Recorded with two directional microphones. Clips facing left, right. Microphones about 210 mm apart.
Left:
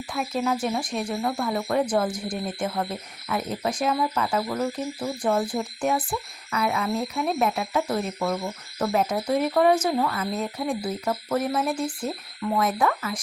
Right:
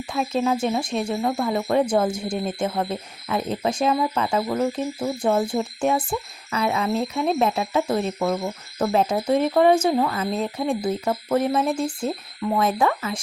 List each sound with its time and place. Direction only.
0.1 s speech: 25° right (ahead or behind)